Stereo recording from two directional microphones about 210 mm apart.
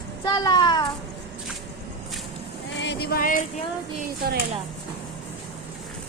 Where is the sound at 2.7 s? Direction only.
55° left (ahead or behind).